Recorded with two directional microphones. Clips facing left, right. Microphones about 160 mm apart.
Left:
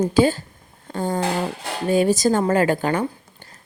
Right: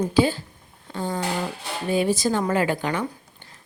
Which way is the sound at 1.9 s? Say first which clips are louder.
Left 4 dB; 45° left (ahead or behind).